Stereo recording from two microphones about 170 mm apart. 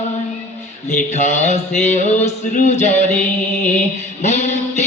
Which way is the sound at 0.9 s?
40° left (ahead or behind).